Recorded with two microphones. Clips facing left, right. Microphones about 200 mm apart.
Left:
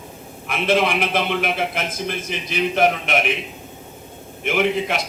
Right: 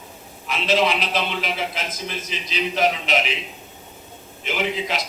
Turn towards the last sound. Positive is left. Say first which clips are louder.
# left 5 dB
turn(degrees=55)  # may be behind; listen again after turning